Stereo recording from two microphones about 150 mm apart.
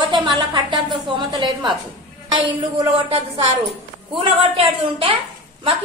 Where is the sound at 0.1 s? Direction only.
30° right (ahead or behind).